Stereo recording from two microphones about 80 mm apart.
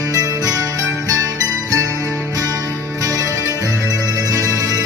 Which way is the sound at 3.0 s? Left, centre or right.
Right.